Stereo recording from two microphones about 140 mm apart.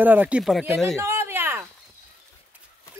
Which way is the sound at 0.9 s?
20° right (ahead or behind).